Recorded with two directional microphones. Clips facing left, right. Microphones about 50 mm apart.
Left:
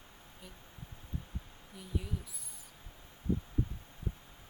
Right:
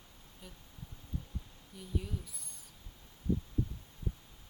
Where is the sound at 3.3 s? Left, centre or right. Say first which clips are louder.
Even; left.